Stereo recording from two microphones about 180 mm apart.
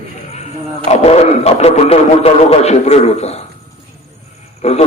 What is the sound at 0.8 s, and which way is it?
A man's voice, 35° left (ahead or behind).